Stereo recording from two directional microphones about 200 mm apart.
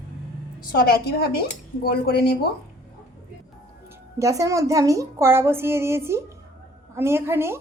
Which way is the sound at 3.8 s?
15° right (ahead or behind).